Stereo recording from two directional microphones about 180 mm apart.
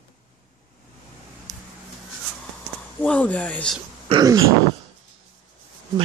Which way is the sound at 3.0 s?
5° left (ahead or behind).